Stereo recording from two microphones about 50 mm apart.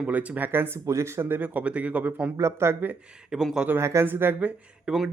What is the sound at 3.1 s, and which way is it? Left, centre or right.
Speech, centre.